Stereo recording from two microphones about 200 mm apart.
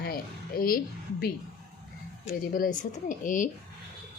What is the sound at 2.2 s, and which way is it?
Speech, 40° left (ahead or behind).